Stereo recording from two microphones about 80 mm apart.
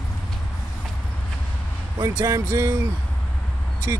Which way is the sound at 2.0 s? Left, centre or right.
Right.